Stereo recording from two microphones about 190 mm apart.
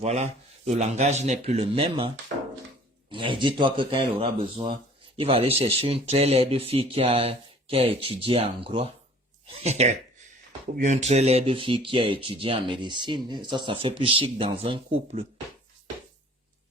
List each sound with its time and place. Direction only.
0.0 s speech: 35° right (ahead or behind)